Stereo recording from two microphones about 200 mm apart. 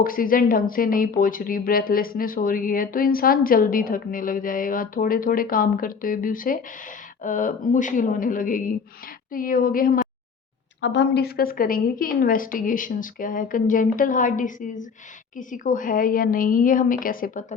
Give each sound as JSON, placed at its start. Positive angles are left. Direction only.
{"t": 0.0, "sound": "speech", "side_deg": 45}
{"t": 10.8, "sound": "speech", "side_deg": 60}